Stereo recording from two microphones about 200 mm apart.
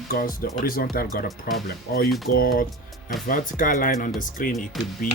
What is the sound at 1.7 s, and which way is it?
Speech, 45° left (ahead or behind).